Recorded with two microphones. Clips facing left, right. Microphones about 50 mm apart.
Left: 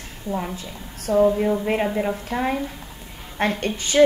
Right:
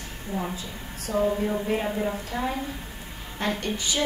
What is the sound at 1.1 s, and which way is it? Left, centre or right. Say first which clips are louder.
Speech: left 8 dB; left.